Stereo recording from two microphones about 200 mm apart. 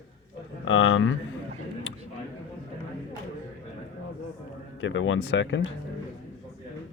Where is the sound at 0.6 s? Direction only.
80° left.